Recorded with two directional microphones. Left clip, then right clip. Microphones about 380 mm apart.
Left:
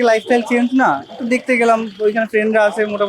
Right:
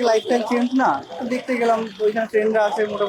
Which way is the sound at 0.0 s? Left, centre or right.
Left.